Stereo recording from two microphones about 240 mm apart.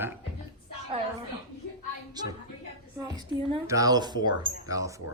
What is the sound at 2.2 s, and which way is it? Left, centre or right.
Speech, centre.